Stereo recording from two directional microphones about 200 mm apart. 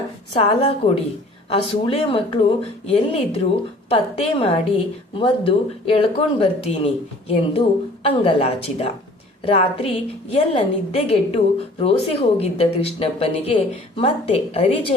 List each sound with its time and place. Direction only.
0.3 s a woman's voice: 30° left (ahead or behind)